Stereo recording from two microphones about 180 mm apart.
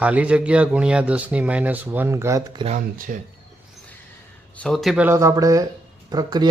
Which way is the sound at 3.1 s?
50° right (ahead or behind).